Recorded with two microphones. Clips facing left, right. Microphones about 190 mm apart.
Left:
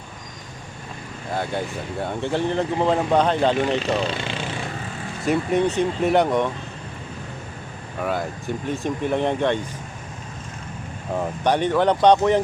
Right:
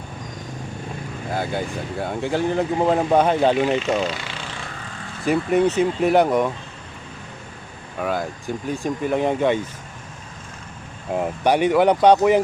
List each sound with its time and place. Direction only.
1.3 s speech: 5° right (ahead or behind)
3.8 s speech: 30° left (ahead or behind)
5.2 s speech: centre (ahead or behind)
8.0 s speech: centre (ahead or behind)
11.2 s speech: 10° right (ahead or behind)